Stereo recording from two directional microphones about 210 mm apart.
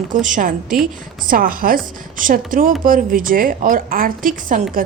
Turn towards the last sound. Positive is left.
turn(degrees=-40)  # may be behind; listen again after turning